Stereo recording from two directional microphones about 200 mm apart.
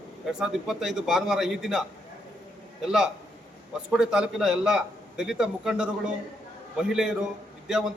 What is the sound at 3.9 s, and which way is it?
A man's voice, 5° right (ahead or behind).